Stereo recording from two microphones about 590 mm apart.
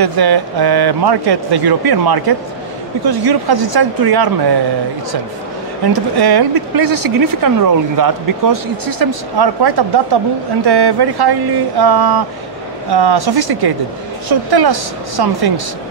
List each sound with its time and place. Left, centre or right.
0.0 s speech: right
5.9 s speech: right